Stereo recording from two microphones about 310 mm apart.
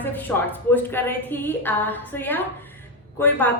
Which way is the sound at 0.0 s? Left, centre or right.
Centre.